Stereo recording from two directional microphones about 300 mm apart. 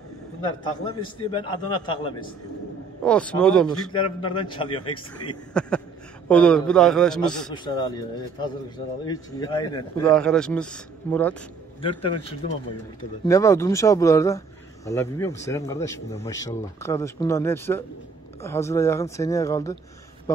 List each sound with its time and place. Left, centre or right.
1.3 s speech: centre
3.0 s a man's voice: centre
3.9 s speech: centre
5.5 s a man's voice: centre
7.5 s speech: centre
10.0 s a man's voice: centre
11.8 s speech: centre